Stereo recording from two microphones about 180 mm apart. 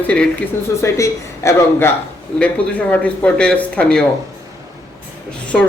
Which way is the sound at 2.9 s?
5° left (ahead or behind).